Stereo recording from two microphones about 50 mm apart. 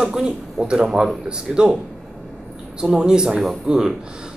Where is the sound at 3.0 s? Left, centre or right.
Centre.